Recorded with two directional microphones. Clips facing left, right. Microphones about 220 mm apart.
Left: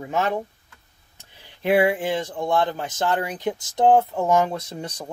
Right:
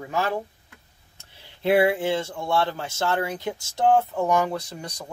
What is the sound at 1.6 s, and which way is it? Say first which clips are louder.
Speech: even; 15° left (ahead or behind).